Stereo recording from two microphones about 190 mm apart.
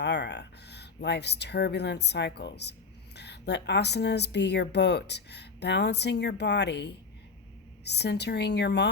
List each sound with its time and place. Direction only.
0.0 s speech: 60° left (ahead or behind)